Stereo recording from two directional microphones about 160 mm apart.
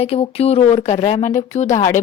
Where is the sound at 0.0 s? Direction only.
40° left (ahead or behind).